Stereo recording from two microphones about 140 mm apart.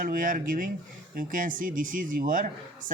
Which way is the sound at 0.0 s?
85° right.